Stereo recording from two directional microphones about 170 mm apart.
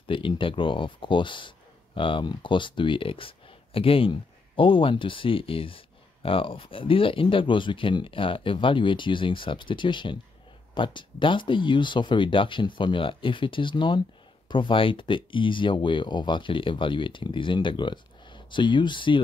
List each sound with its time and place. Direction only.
0.1 s speech: 30° left (ahead or behind)